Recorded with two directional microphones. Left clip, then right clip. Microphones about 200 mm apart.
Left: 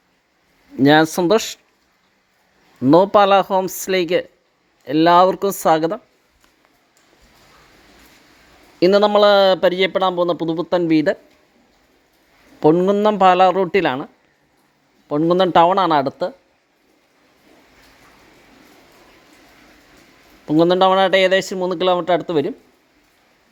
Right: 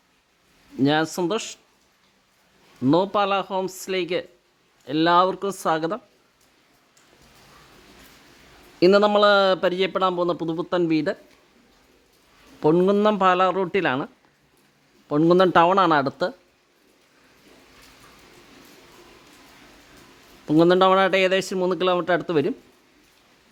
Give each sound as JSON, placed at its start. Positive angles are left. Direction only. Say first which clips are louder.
{"t": 0.8, "sound": "speech", "louder": "left 8 dB", "side_deg": 25}
{"t": 2.9, "sound": "a man's voice", "louder": "left 9 dB", "side_deg": 20}
{"t": 8.8, "sound": "a man's voice", "louder": "left 4 dB", "side_deg": 10}
{"t": 12.7, "sound": "a man's voice", "louder": "left 3 dB", "side_deg": 5}
{"t": 15.1, "sound": "a man's voice", "louder": "left 2 dB", "side_deg": 0}
{"t": 20.4, "sound": "a man's voice", "louder": "left 3 dB", "side_deg": 0}